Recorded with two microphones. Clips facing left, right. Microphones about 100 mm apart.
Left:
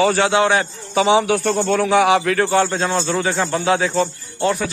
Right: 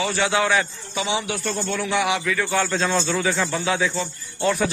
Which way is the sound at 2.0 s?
50° left (ahead or behind).